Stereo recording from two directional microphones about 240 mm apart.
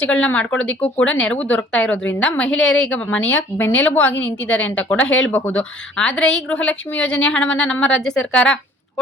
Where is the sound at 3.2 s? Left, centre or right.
Left.